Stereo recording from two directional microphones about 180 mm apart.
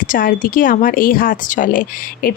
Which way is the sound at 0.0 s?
50° left (ahead or behind).